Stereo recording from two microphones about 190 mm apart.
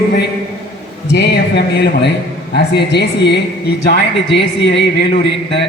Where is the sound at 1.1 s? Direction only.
65° left (ahead or behind).